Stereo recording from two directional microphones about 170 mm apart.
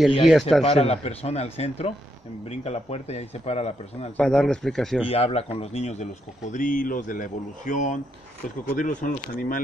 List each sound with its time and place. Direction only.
0.3 s speech: centre (ahead or behind)
0.7 s a man's voice: 35° left (ahead or behind)
4.2 s speech: 5° left (ahead or behind)
5.0 s a man's voice: 35° left (ahead or behind)
6.5 s speech: 50° left (ahead or behind)